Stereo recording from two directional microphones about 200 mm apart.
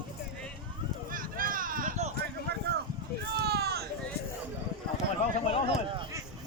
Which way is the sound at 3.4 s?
55° right (ahead or behind).